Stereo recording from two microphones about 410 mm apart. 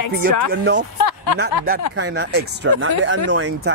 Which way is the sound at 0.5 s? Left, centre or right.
Right.